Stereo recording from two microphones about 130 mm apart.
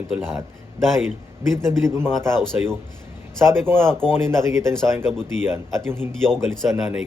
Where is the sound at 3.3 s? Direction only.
20° right (ahead or behind).